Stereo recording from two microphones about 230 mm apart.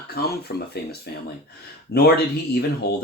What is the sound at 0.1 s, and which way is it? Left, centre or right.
Speech, left.